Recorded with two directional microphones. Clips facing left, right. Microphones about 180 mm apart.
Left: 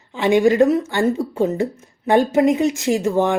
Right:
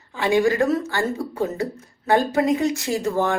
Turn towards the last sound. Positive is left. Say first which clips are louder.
# left 4 dB
turn(degrees=20)  # may be behind; listen again after turning